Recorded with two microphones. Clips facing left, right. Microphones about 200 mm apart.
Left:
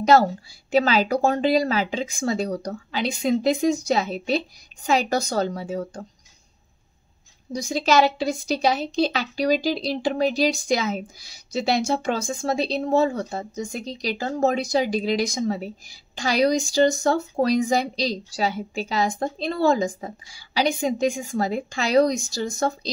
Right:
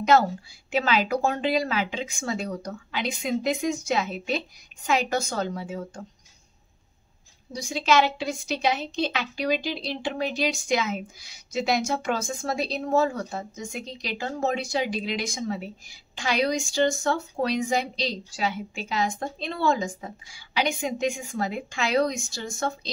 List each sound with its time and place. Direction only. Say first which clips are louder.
0.0 s a woman's voice: left 3 dB; 35° left (ahead or behind)
7.5 s a woman's voice: left 3 dB; 40° left (ahead or behind)